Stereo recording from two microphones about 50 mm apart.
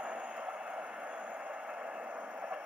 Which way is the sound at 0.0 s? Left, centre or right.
Centre.